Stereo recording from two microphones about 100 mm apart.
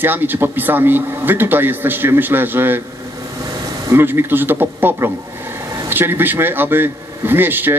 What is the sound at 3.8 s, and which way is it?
Speech, 25° right (ahead or behind).